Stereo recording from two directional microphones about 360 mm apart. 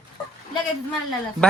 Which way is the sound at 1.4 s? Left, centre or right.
Centre.